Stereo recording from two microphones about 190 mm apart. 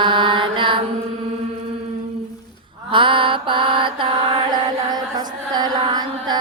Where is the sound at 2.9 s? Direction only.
25° right (ahead or behind).